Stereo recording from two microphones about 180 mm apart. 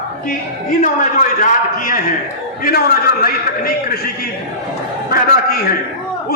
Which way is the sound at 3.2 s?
55° left (ahead or behind).